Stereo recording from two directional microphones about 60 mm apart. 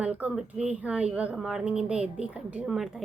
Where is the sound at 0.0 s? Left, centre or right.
Right.